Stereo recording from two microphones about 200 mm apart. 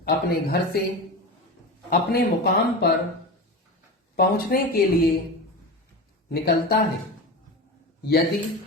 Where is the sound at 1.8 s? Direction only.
45° left (ahead or behind).